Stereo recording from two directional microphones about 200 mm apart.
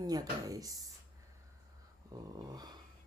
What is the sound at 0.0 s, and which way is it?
Speech, 20° right (ahead or behind).